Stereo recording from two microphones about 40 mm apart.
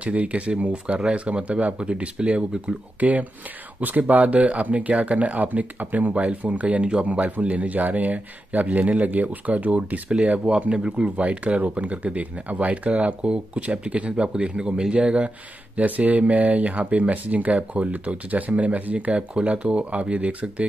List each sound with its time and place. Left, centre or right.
0.0 s speech: right
3.0 s speech: right
10.5 s speech: centre
11.1 s speech: right